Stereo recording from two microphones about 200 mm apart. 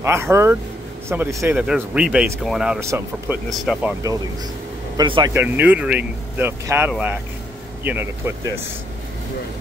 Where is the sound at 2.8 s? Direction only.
15° right (ahead or behind).